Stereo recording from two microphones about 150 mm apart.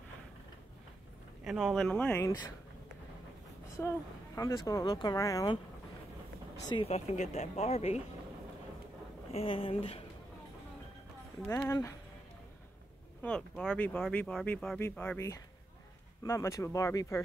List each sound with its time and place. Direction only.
1.4 s speech: centre (ahead or behind); by 2.3 s 15° left (ahead or behind)
3.8 s speech: 15° left (ahead or behind)
6.8 s speech: 45° left (ahead or behind)
9.3 s speech: 40° left (ahead or behind)
11.4 s speech: 15° left (ahead or behind)
13.2 s speech: 5° left (ahead or behind)